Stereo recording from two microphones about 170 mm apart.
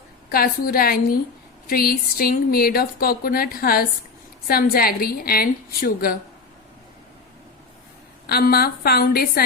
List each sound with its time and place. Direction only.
0.3 s speech: 60° left (ahead or behind)
8.3 s speech: 65° left (ahead or behind)